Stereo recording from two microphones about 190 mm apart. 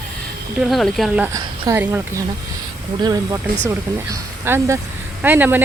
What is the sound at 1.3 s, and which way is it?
Speech, 15° right (ahead or behind).